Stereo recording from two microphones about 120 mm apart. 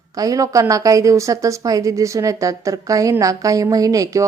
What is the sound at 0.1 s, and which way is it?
Speech, 30° right (ahead or behind).